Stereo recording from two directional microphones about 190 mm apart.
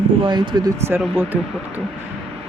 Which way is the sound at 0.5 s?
20° right (ahead or behind).